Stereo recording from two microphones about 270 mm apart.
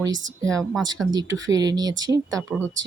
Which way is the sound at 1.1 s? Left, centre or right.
Centre.